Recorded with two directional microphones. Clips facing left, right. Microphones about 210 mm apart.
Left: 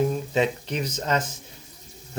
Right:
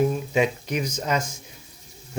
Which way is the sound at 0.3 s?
10° right (ahead or behind).